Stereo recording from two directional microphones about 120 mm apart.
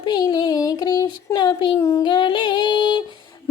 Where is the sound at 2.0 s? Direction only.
40° left (ahead or behind).